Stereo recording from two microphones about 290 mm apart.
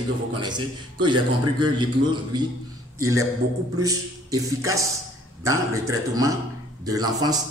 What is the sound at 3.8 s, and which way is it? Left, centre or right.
A man's voice, centre.